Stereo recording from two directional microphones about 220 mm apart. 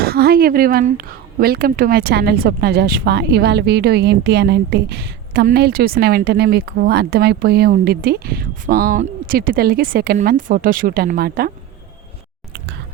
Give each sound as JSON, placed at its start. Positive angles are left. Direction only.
{"t": 0.0, "sound": "a woman's voice", "side_deg": -45}